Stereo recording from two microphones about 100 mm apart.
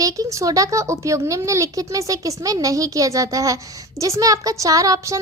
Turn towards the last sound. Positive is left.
turn(degrees=-35)  # may be behind; listen again after turning